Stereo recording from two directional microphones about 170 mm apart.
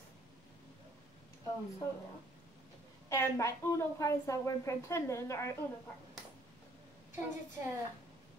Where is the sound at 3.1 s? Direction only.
15° left (ahead or behind).